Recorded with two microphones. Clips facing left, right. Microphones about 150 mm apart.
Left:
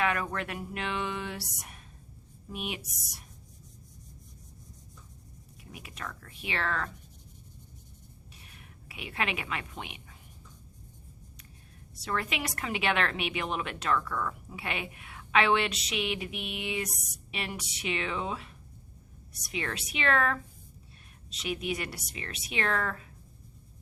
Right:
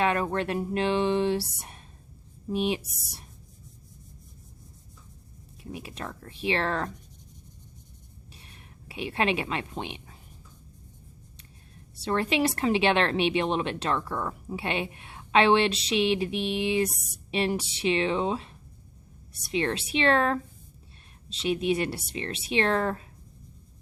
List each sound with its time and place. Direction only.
0.0 s a woman's voice: 30° right (ahead or behind)
5.7 s a woman's voice: 30° right (ahead or behind)
8.4 s a sound: 30° right (ahead or behind)
11.9 s a woman's voice: 30° right (ahead or behind)